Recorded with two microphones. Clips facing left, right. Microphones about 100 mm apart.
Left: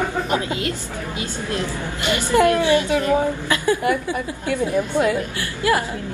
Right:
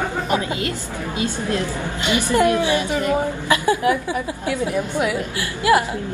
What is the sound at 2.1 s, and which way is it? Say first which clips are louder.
A woman's voice: left 1 dB; 15° right (ahead or behind).